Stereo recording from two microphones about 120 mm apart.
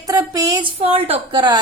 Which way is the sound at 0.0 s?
30° right (ahead or behind).